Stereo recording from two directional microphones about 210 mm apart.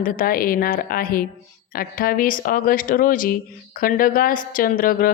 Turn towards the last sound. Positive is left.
turn(degrees=45)  # may be behind; listen again after turning